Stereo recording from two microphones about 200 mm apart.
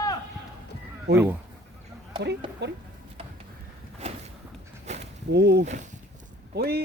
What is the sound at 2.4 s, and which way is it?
Speech, 25° right (ahead or behind).